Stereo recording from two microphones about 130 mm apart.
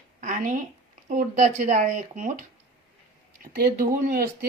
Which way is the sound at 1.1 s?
70° right (ahead or behind).